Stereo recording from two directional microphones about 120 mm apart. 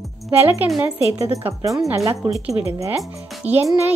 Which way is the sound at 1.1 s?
25° right (ahead or behind).